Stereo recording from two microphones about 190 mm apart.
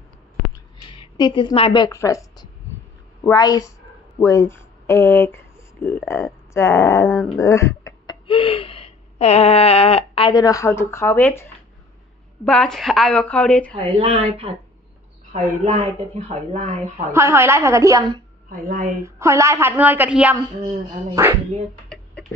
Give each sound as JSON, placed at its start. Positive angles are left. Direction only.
{"t": 0.7, "sound": "a woman's voice", "side_deg": 25}
{"t": 7.1, "sound": "a woman's voice", "side_deg": 0}
{"t": 7.3, "sound": "speech", "side_deg": 15}
{"t": 12.4, "sound": "a woman's voice", "side_deg": 5}
{"t": 13.7, "sound": "speech", "side_deg": -30}
{"t": 16.9, "sound": "a woman's voice", "side_deg": -15}
{"t": 18.5, "sound": "speech", "side_deg": -45}
{"t": 19.0, "sound": "a woman's voice", "side_deg": -15}
{"t": 21.8, "sound": "a sound", "side_deg": 5}